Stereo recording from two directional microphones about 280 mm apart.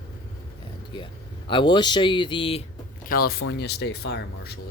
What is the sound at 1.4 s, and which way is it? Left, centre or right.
Speech, centre.